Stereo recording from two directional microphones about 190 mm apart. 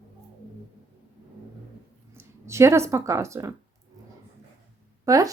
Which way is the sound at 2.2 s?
15° right (ahead or behind).